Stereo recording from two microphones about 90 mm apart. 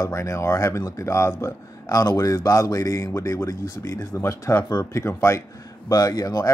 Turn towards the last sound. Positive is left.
turn(degrees=40)  # may be behind; listen again after turning